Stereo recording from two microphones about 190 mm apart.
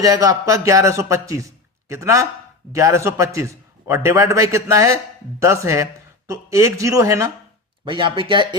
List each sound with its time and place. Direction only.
0.0 s a man's voice: 20° right (ahead or behind)